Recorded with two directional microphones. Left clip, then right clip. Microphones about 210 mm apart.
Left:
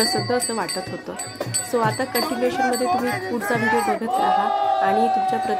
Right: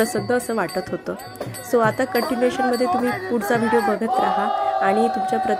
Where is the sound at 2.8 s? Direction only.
30° left (ahead or behind).